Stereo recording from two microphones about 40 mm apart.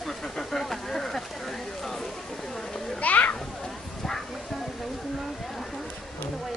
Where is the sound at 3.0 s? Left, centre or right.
Left.